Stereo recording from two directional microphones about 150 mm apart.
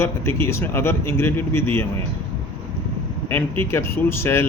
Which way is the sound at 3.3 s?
15° left (ahead or behind).